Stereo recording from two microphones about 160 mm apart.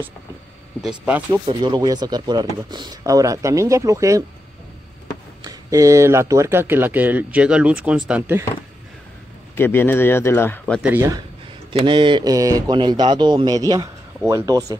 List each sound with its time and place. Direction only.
0.7 s speech: 5° right (ahead or behind)
1.4 s speech: 30° right (ahead or behind)
5.4 s speech: 20° right (ahead or behind)
9.6 s speech: 15° left (ahead or behind)
10.6 s speech: centre (ahead or behind)
10.9 s speech: 20° right (ahead or behind)
11.7 s speech: 30° right (ahead or behind)